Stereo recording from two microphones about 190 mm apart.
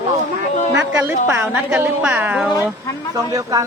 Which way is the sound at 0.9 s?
15° right (ahead or behind).